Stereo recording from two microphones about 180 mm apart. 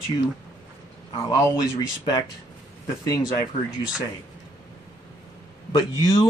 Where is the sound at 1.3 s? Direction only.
20° left (ahead or behind).